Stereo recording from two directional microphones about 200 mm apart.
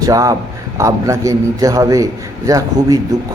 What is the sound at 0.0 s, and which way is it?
A man's voice, 15° right (ahead or behind).